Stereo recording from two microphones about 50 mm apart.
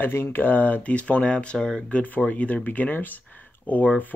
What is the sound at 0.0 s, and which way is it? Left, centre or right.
Speech, left.